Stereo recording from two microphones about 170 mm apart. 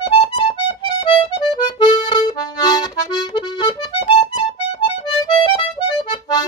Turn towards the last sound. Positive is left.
turn(degrees=30)  # may be behind; listen again after turning